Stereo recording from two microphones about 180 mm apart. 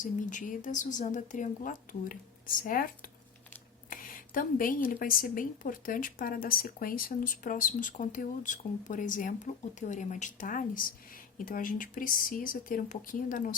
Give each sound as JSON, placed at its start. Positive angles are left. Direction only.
{"t": 0.0, "sound": "speech", "side_deg": 45}